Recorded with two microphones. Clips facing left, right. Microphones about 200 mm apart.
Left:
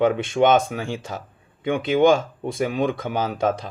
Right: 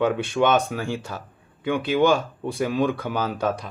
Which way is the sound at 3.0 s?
20° left (ahead or behind).